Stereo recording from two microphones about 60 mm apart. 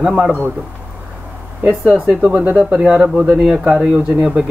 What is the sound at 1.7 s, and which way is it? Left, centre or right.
Speech, centre.